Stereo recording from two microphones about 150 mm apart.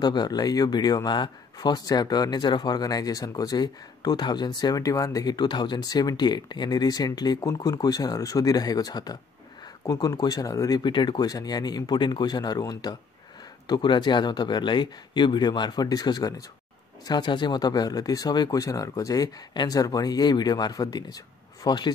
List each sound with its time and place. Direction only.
0.0 s speech: 30° left (ahead or behind)